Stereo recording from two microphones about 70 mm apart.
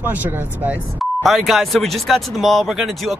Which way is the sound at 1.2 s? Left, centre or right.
Centre.